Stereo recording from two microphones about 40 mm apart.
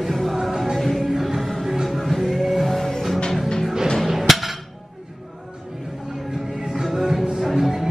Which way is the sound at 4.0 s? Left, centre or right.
Centre.